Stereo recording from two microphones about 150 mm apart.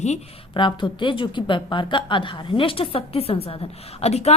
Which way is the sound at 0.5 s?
35° left (ahead or behind).